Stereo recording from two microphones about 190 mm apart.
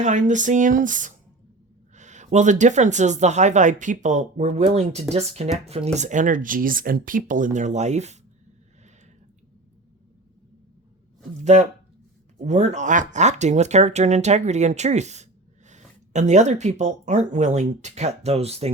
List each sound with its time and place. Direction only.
0.0 s speech: 40° right (ahead or behind)
11.4 s speech: 40° right (ahead or behind)